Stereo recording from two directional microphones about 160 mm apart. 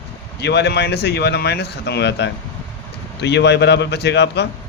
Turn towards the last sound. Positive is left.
turn(degrees=90)